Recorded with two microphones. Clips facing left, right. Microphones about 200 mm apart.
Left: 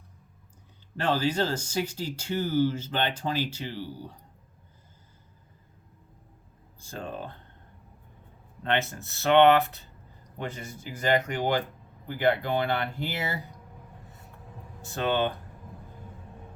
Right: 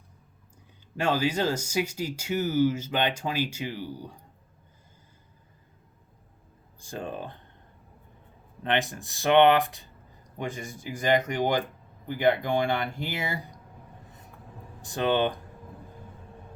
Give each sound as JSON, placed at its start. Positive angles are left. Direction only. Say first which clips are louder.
{"t": 0.9, "sound": "speech", "louder": "even", "side_deg": -10}
{"t": 6.7, "sound": "speech", "louder": "right 2 dB", "side_deg": -15}
{"t": 8.6, "sound": "speech", "louder": "right 1 dB", "side_deg": -15}
{"t": 14.8, "sound": "speech", "louder": "right 2 dB", "side_deg": -15}